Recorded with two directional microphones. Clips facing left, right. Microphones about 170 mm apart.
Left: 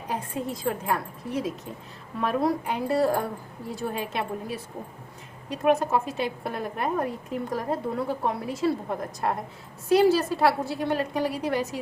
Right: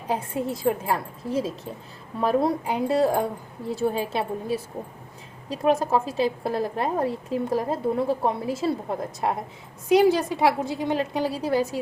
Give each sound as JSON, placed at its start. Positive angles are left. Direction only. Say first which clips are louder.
{"t": 0.1, "sound": "a woman's voice", "louder": "right 4 dB", "side_deg": -25}
{"t": 9.9, "sound": "a woman's voice", "louder": "right 1 dB", "side_deg": -15}